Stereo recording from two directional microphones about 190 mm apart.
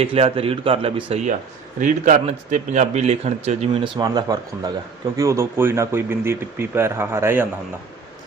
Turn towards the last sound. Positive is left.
turn(degrees=-10)  # may be behind; listen again after turning